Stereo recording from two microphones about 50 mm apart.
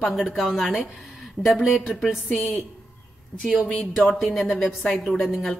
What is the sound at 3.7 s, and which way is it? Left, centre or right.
A woman's voice, centre.